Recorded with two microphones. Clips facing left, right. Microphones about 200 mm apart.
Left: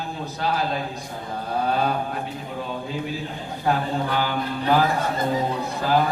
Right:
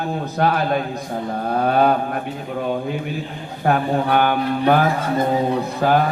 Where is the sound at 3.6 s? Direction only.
60° right (ahead or behind).